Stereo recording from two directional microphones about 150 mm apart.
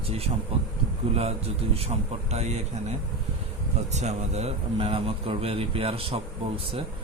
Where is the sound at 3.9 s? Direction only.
50° right (ahead or behind).